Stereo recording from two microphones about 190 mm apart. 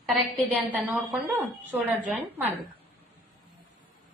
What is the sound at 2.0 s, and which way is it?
Speech, 5° right (ahead or behind).